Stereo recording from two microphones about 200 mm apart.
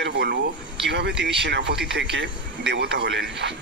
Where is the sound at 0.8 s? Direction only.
60° right (ahead or behind).